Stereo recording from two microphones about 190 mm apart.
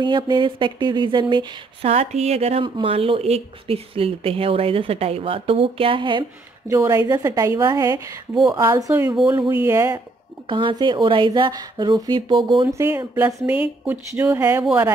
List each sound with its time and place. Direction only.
0.0 s speech: 25° right (ahead or behind)
6.7 s speech: 15° right (ahead or behind)
9.7 s speech: 15° right (ahead or behind)